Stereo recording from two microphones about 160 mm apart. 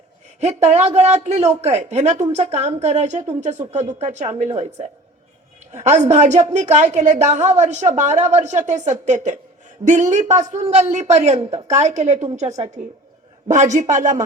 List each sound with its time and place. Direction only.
0.3 s a woman's voice: 45° right (ahead or behind)